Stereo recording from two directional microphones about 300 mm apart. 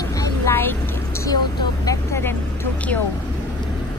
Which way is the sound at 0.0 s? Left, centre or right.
Centre.